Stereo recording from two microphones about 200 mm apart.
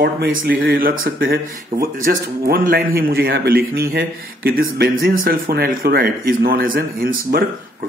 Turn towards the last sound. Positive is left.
turn(degrees=-50)  # may be behind; listen again after turning